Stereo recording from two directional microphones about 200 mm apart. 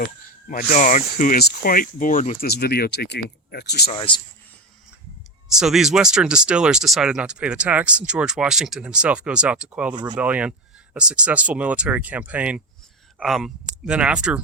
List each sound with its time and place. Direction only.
0.0 s speech: 40° left (ahead or behind)
3.9 s a man's voice: 25° left (ahead or behind)
5.5 s speech: centre (ahead or behind)
9.9 s speech: 20° right (ahead or behind)
10.2 s speech: 5° right (ahead or behind)